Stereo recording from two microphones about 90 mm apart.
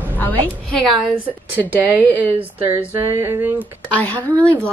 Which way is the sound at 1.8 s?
25° right (ahead or behind).